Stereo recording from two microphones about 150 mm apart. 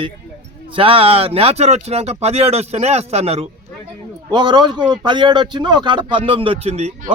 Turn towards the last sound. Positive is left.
turn(degrees=-45)  # may be behind; listen again after turning